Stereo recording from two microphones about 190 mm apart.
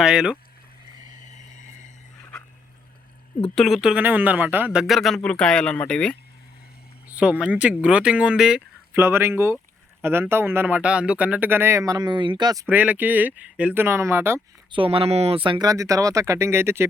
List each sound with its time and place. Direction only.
0.0 s speech: 5° right (ahead or behind)
1.1 s a sound: 40° left (ahead or behind)
3.4 s speech: centre (ahead or behind)
7.1 s speech: 5° right (ahead or behind)
12.6 s speech: 10° right (ahead or behind)
14.7 s speech: 30° right (ahead or behind); by 16.9 s 15° right (ahead or behind)